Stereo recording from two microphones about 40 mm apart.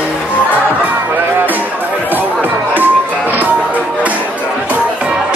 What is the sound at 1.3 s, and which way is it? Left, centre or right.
Music, right.